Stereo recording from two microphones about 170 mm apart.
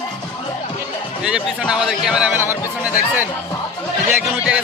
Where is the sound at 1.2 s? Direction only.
5° right (ahead or behind).